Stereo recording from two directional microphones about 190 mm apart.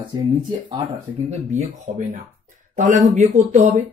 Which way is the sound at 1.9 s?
40° right (ahead or behind).